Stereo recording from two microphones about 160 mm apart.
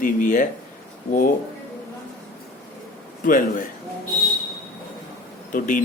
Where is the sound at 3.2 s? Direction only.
55° left (ahead or behind).